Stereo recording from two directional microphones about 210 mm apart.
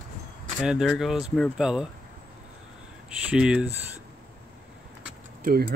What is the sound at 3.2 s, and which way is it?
Speech, 5° right (ahead or behind).